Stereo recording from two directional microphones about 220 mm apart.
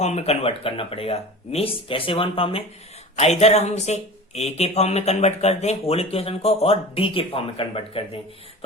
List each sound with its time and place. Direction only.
0.0 s speech: 30° left (ahead or behind)